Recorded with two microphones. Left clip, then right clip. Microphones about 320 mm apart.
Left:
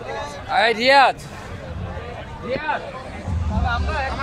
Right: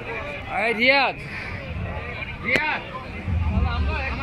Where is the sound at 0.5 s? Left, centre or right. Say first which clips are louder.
Left 4 dB; left.